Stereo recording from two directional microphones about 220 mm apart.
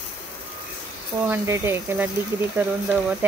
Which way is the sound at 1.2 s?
10° right (ahead or behind).